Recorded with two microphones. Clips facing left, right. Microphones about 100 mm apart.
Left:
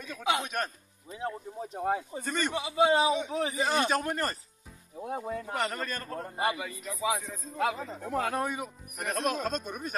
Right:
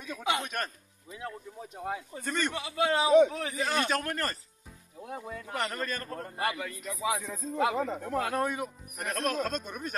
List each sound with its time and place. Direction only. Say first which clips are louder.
0.2 s speech: left 2 dB; 5° left (ahead or behind)
1.1 s speech: left 5 dB; 25° left (ahead or behind)
2.2 s speech: right 2 dB; 5° left (ahead or behind)
2.5 s speech: left 6 dB; 20° left (ahead or behind)
4.9 s speech: left 5 dB; 30° left (ahead or behind)
5.6 s speech: right 3 dB; 5° left (ahead or behind)
6.3 s speech: left 2 dB; 15° left (ahead or behind)
6.8 s speech: right 1 dB; centre (ahead or behind)
7.7 s speech: right 8 dB; 65° right (ahead or behind)
8.0 s speech: even; centre (ahead or behind)